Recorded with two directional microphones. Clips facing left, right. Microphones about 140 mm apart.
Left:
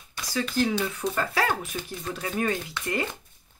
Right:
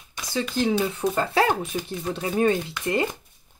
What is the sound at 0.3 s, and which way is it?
Speech, 25° right (ahead or behind).